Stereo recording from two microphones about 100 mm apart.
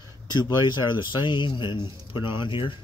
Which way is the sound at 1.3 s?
50° left (ahead or behind).